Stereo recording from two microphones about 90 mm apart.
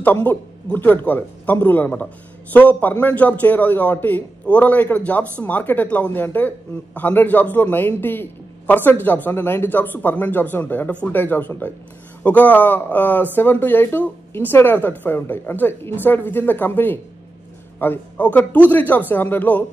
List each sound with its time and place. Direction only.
0.0 s a man's voice: 20° left (ahead or behind)